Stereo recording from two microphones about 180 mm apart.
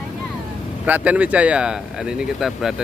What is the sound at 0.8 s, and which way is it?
Speech, 10° right (ahead or behind).